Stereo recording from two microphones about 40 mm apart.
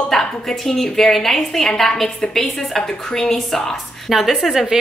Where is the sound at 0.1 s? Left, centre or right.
Centre.